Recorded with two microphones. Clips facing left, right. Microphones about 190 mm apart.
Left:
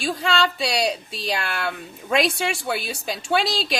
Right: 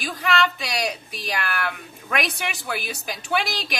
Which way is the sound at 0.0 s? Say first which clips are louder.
Left 1 dB; 30° left (ahead or behind).